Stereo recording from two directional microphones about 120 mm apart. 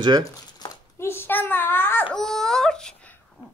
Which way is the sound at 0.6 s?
35° left (ahead or behind).